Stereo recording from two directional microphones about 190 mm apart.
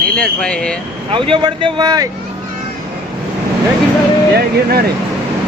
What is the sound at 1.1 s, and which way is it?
Speech, 25° right (ahead or behind).